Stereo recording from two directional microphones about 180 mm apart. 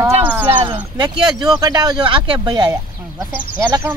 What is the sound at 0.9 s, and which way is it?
Speech, 25° right (ahead or behind).